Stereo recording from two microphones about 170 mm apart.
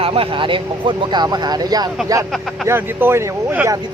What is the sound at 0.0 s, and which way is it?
Speech, 30° right (ahead or behind).